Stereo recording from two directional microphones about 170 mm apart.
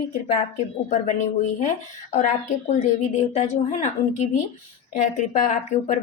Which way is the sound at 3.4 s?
45° left (ahead or behind).